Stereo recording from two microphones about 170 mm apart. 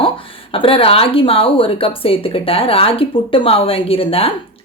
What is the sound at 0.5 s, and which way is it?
Speech, 30° left (ahead or behind).